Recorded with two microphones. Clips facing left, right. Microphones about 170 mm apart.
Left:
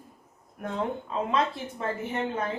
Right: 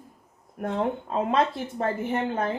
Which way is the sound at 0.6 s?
45° right (ahead or behind).